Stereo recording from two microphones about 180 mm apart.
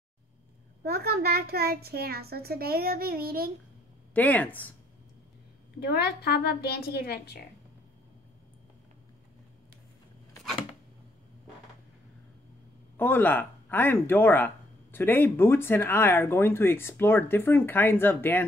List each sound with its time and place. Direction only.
0.8 s a child's voice: 60° right (ahead or behind)
4.1 s speech: 10° left (ahead or behind)
5.8 s a woman's voice: 65° left (ahead or behind)
12.9 s speech: 10° left (ahead or behind)